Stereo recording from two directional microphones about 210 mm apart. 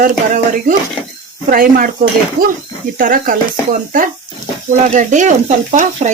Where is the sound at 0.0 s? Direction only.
40° right (ahead or behind).